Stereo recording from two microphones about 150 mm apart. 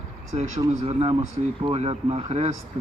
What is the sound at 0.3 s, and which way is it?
Speech, 40° right (ahead or behind).